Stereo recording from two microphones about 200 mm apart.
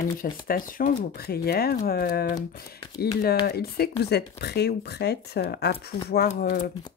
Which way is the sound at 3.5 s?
50° left (ahead or behind).